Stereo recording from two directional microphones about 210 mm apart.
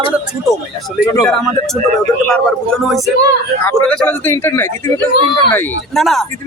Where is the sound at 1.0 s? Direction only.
15° left (ahead or behind).